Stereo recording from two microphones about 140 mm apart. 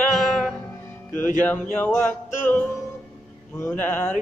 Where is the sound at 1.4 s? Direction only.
10° left (ahead or behind).